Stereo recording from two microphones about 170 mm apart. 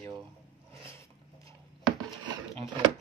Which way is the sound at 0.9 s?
15° left (ahead or behind).